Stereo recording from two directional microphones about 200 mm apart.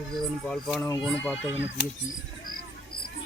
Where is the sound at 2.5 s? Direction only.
50° left (ahead or behind).